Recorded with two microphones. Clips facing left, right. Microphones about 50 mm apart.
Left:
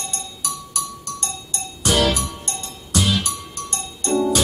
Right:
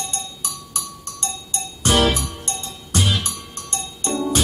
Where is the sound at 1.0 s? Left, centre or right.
Right.